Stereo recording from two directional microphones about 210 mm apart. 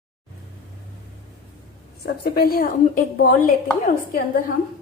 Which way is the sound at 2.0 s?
50° left (ahead or behind).